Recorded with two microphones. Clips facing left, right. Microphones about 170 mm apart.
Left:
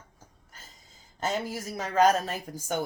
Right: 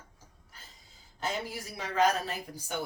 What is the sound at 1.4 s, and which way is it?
Speech, 45° left (ahead or behind).